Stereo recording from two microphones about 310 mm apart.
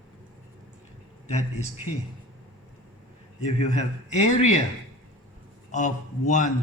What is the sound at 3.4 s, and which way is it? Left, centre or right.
Speech, left.